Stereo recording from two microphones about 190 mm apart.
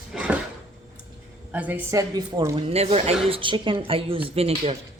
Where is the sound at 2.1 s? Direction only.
20° right (ahead or behind).